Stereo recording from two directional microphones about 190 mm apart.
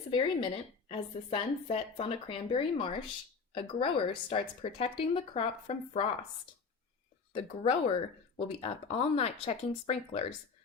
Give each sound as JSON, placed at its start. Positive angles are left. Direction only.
{"t": 0.1, "sound": "a woman's voice", "side_deg": 25}
{"t": 7.3, "sound": "speech", "side_deg": 30}